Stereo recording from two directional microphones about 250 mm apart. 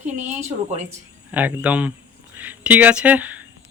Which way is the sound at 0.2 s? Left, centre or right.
Right.